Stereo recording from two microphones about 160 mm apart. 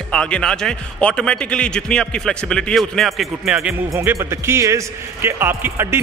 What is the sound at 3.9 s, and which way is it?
A man's voice, 15° right (ahead or behind).